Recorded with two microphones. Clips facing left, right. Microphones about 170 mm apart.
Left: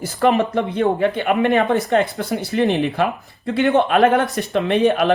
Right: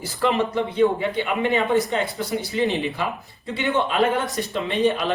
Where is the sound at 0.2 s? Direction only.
55° left (ahead or behind).